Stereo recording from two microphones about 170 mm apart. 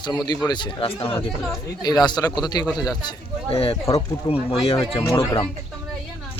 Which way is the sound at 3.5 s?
35° left (ahead or behind).